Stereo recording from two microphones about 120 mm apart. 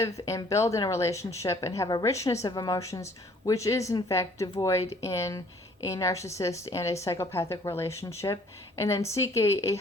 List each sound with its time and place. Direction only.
0.0 s speech: 30° left (ahead or behind)